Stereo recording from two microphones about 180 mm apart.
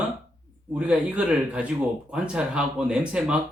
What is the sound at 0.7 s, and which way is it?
Speech, 5° right (ahead or behind).